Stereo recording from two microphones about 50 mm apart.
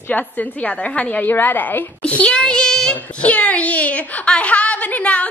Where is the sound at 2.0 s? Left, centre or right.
Left.